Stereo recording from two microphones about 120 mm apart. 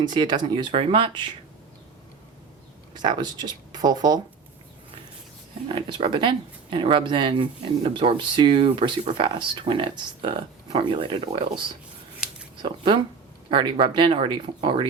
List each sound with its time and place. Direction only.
0.0 s speech: 40° right (ahead or behind)
2.9 s speech: 40° right (ahead or behind)
5.6 s speech: 45° right (ahead or behind)
12.6 s speech: 45° right (ahead or behind)